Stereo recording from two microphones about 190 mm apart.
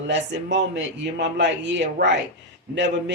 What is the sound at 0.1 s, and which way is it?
A man's voice, 70° right (ahead or behind).